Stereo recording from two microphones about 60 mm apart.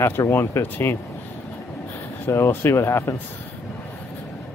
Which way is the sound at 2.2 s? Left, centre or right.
Left.